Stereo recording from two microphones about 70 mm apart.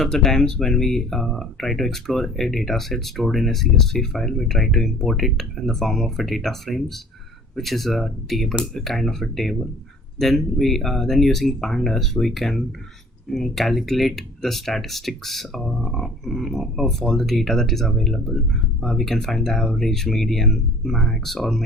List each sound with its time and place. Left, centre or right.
0.0 s speech: centre